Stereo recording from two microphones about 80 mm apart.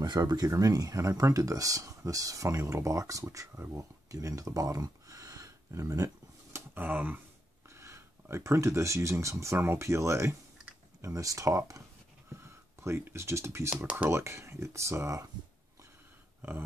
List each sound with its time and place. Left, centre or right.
0.0 s speech: right
3.7 s a sound: right
6.7 s speech: right
7.7 s speech: right
12.8 s speech: right
13.8 s speech: centre
14.1 s speech: right